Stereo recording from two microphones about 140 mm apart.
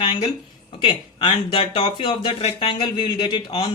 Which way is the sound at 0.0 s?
35° left (ahead or behind).